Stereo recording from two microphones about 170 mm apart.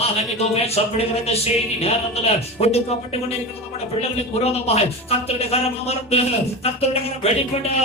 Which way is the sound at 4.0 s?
35° left (ahead or behind).